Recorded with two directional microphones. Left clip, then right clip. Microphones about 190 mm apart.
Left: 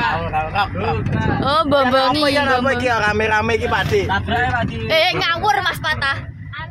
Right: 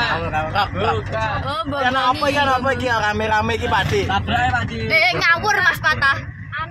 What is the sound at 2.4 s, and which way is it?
Speech, 15° left (ahead or behind).